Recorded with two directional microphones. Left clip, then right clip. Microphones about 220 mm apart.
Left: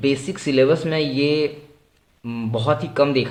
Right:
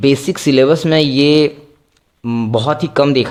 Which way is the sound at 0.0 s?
45° right (ahead or behind).